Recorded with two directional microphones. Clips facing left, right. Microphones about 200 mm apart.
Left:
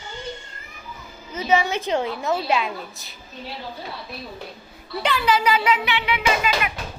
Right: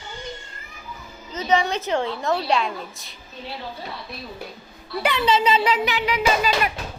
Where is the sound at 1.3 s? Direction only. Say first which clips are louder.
Even; 10° left (ahead or behind).